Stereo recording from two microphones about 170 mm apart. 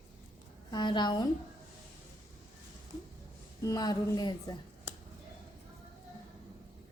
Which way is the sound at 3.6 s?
20° left (ahead or behind).